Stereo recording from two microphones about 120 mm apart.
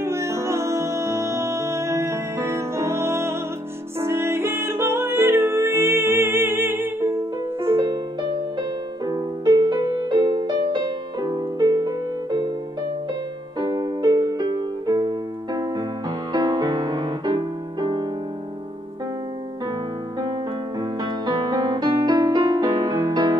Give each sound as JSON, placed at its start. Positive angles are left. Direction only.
{"t": 0.0, "sound": "music", "side_deg": -20}
{"t": 7.8, "sound": "music", "side_deg": -30}
{"t": 13.6, "sound": "music", "side_deg": -30}
{"t": 20.8, "sound": "music", "side_deg": -35}